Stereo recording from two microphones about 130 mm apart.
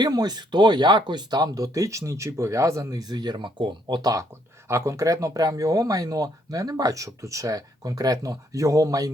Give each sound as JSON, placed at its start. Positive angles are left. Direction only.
{"t": 0.0, "sound": "speech", "side_deg": -30}